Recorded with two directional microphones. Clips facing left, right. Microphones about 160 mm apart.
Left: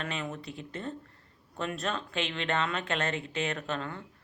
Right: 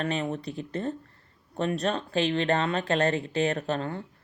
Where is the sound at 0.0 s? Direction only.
35° right (ahead or behind).